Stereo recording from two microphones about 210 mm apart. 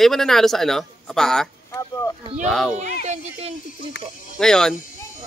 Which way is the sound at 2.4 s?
Centre (ahead or behind).